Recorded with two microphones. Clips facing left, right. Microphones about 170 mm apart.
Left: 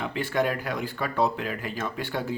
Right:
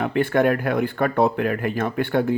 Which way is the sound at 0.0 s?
55° right (ahead or behind).